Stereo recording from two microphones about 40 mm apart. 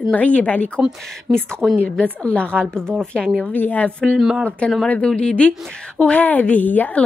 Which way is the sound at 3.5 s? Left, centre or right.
Left.